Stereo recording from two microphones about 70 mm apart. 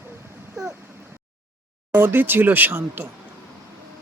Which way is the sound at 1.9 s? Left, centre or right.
Right.